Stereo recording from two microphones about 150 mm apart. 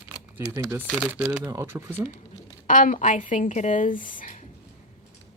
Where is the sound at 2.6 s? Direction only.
60° left (ahead or behind).